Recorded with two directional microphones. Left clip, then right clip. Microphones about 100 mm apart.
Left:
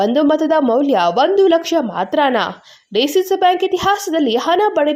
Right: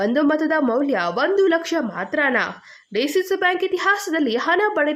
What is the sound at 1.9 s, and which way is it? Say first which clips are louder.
A woman's voice: left 4 dB; 30° left (ahead or behind).